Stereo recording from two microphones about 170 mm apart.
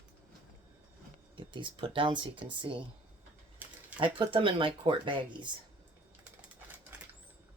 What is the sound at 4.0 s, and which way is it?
Speech, 30° right (ahead or behind).